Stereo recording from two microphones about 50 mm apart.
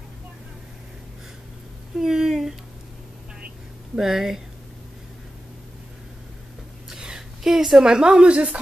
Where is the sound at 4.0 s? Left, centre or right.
Centre.